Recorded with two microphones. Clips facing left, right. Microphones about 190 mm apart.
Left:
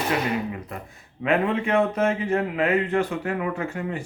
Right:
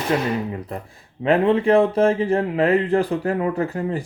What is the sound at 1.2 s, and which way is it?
Speech, 35° right (ahead or behind).